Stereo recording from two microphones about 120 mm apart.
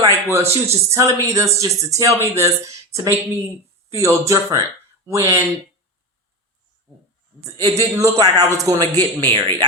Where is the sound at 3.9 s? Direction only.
25° right (ahead or behind).